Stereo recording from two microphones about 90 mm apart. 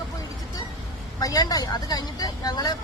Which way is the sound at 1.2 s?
45° left (ahead or behind).